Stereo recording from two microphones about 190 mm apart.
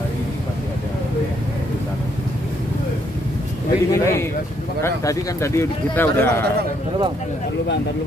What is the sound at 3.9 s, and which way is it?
A man's voice, 15° left (ahead or behind).